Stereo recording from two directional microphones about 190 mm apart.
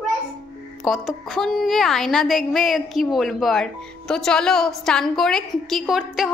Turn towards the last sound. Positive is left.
turn(degrees=0)  # may be behind; listen again after turning